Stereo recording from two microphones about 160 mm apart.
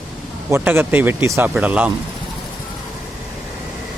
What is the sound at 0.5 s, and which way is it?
Speech, 10° right (ahead or behind).